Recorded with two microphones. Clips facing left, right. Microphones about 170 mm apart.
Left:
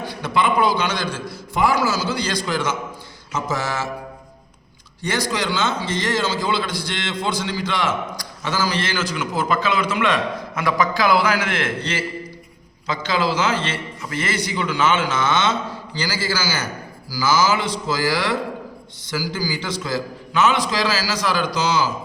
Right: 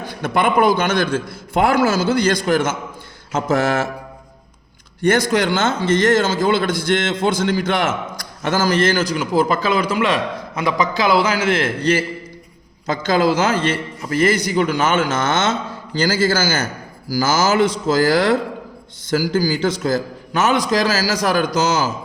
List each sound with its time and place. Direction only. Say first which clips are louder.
0.0 s a man's voice: right 2 dB; 50° right (ahead or behind)
3.3 s mantra: right 7 dB; 55° right (ahead or behind)
5.0 s a man's voice: right 7 dB; 50° right (ahead or behind); by 10.0 s 35° right (ahead or behind)
10.5 s a man's voice: right 1 dB; 20° right (ahead or behind); by 21.9 s 45° right (ahead or behind)